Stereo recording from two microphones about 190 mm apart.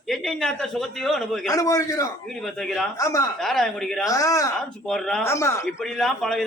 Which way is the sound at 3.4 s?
Centre (ahead or behind).